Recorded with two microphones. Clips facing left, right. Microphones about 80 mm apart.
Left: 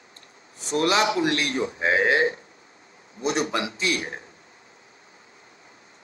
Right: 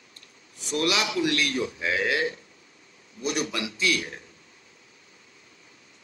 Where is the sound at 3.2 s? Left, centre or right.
Left.